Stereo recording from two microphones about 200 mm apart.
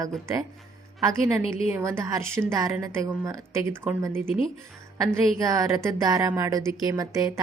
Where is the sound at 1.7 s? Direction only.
15° right (ahead or behind).